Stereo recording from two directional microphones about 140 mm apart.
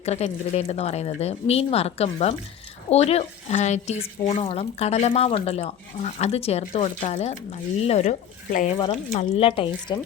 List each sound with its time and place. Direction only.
0.0 s speech: 50° left (ahead or behind)
4.4 s speech: 45° left (ahead or behind); by 8.7 s 60° left (ahead or behind)
9.1 s speech: 45° left (ahead or behind)